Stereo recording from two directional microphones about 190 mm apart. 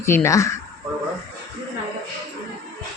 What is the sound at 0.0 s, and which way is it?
Speech, 15° left (ahead or behind).